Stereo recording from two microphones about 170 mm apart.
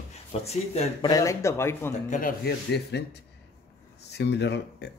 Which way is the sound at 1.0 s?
20° left (ahead or behind).